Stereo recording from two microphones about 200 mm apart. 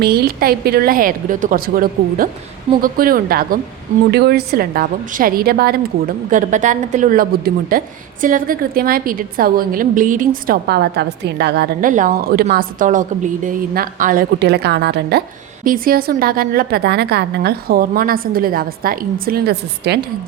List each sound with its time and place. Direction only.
0.0 s a woman's voice: 50° right (ahead or behind)
6.3 s a woman's voice: 40° right (ahead or behind); by 15.2 s 55° right (ahead or behind)
15.6 s a woman's voice: 45° right (ahead or behind)